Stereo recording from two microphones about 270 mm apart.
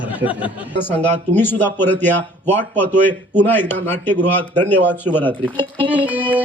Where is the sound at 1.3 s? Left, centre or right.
Centre.